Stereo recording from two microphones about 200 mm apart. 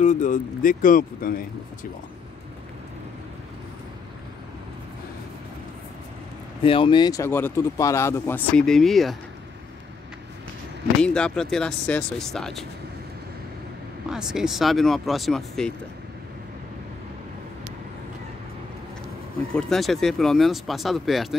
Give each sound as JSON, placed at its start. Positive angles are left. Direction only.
{"t": 0.0, "sound": "speech", "side_deg": 40}
{"t": 6.6, "sound": "speech", "side_deg": 25}
{"t": 11.0, "sound": "speech", "side_deg": 5}
{"t": 14.1, "sound": "speech", "side_deg": -5}
{"t": 19.5, "sound": "speech", "side_deg": 0}